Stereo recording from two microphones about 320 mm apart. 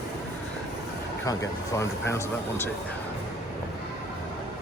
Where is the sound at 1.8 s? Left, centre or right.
Centre.